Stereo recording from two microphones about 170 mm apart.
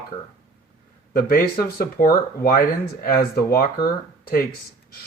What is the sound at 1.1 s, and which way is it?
Speech, 60° left (ahead or behind).